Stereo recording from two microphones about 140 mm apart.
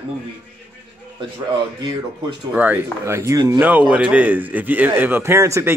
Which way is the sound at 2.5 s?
10° right (ahead or behind).